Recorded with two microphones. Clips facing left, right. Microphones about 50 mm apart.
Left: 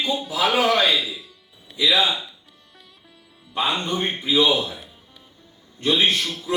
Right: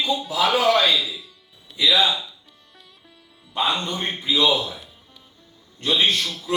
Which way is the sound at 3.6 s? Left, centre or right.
Left.